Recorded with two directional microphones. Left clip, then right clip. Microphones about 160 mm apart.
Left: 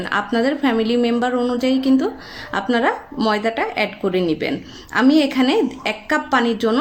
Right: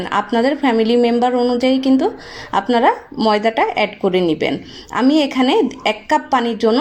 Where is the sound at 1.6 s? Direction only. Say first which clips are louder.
Right 3 dB; 35° left (ahead or behind).